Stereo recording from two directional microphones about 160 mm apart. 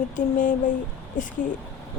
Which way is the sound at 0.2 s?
55° left (ahead or behind).